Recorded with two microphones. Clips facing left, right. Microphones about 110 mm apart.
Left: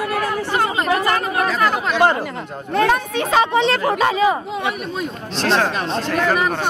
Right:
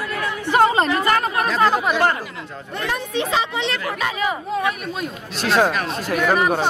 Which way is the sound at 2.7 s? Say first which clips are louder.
Left 7 dB; 60° left (ahead or behind).